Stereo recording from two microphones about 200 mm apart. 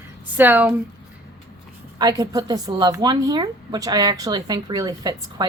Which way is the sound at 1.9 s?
20° right (ahead or behind).